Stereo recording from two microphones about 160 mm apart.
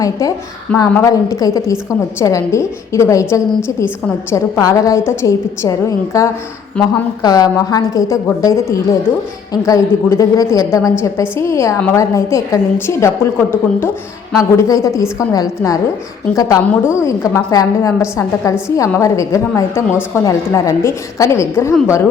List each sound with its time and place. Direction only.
0.0 s a woman's voice: 20° left (ahead or behind)